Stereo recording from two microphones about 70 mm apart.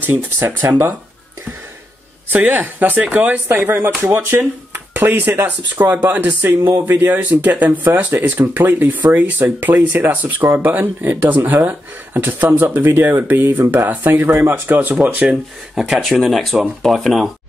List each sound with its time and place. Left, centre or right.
0.0 s speech: right
2.2 s speech: right
15.2 s speech: centre